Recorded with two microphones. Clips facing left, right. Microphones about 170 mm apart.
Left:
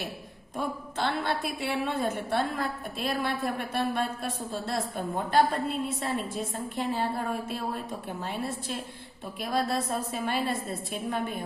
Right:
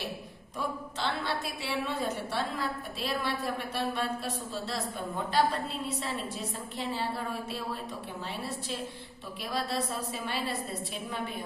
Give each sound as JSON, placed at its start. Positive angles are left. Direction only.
{"t": 0.9, "sound": "a woman's voice", "side_deg": 55}
{"t": 8.2, "sound": "a woman's voice", "side_deg": 50}